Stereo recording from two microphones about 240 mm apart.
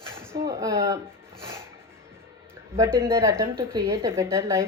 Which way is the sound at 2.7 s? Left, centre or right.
Centre.